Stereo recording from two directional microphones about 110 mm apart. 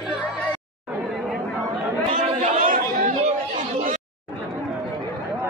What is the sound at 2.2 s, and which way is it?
Chatter, 80° right.